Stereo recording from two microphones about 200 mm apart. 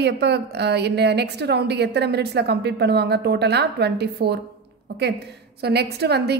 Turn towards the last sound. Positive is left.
turn(degrees=-55)  # may be behind; listen again after turning